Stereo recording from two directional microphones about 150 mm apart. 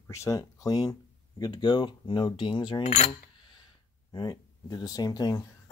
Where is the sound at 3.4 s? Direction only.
30° left (ahead or behind).